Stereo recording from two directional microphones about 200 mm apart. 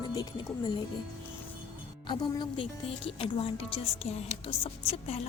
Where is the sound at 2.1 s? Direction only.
25° left (ahead or behind).